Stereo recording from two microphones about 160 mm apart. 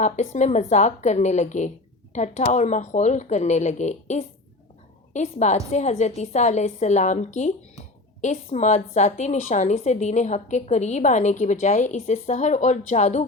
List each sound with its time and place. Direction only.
0.0 s a woman's voice: 45° left (ahead or behind)